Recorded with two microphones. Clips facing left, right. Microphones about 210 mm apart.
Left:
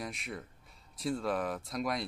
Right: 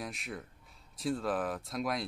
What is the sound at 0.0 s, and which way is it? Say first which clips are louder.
Speech: even; centre (ahead or behind).